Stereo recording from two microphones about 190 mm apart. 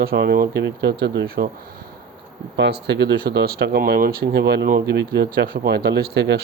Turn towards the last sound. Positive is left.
turn(degrees=-60)  # may be behind; listen again after turning